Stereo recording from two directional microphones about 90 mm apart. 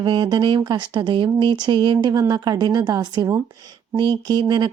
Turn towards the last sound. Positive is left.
turn(degrees=-50)  # may be behind; listen again after turning